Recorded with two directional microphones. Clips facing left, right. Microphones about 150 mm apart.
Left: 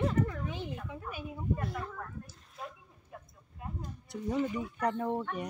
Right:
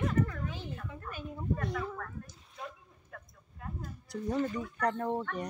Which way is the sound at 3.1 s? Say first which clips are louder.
Left 1 dB; 15° left (ahead or behind).